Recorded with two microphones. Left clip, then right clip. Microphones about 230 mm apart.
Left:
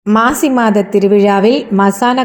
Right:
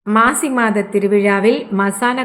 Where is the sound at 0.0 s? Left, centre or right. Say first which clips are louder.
Left 2 dB; centre.